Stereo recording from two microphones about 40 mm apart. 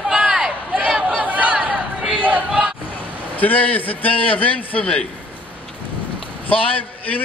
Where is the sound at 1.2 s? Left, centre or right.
Right.